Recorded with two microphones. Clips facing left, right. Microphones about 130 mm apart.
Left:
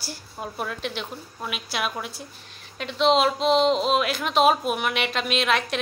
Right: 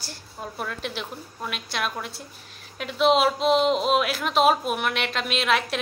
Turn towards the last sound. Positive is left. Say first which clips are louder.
# even
turn(degrees=0)  # may be behind; listen again after turning